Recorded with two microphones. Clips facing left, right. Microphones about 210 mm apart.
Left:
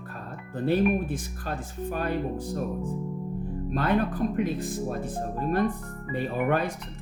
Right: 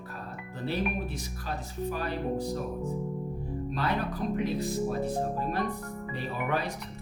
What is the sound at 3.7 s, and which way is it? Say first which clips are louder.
Speech: left 7 dB; 50° left (ahead or behind).